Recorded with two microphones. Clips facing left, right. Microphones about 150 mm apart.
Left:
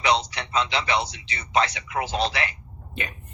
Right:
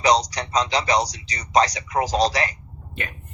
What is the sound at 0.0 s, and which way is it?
Speech, 40° right (ahead or behind).